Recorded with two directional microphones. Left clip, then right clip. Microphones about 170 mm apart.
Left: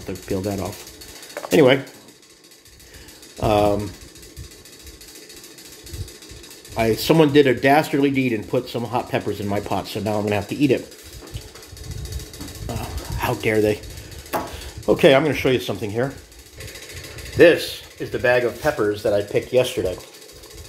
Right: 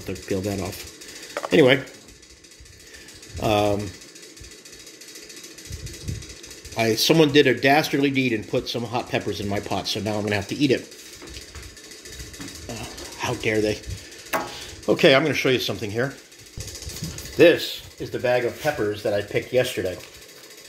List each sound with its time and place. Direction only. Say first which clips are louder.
0.0 s speech: left 1 dB; centre (ahead or behind)
3.3 s speech: left 3 dB; 5° left (ahead or behind)
6.7 s speech: left 1 dB; 5° left (ahead or behind)
12.6 s a sound: left 5 dB; 15° left (ahead or behind)
14.9 s speech: left 2 dB; 10° left (ahead or behind)
17.4 s speech: left 2 dB; centre (ahead or behind)